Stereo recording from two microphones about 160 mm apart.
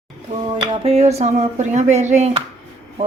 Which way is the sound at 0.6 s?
35° right (ahead or behind).